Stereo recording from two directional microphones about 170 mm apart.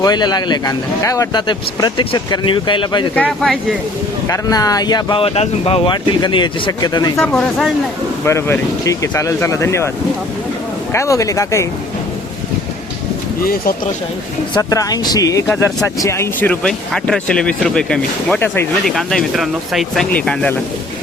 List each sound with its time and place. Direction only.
0.0 s speech: 25° left (ahead or behind)
3.2 s speech: 5° left (ahead or behind)
4.3 s speech: 20° left (ahead or behind)
7.2 s speech: 5° left (ahead or behind)
8.2 s speech: 15° left (ahead or behind)
10.9 s speech: 20° left (ahead or behind)
13.4 s speech: 60° left (ahead or behind)
14.5 s speech: 20° left (ahead or behind)
18.9 s speech: centre (ahead or behind)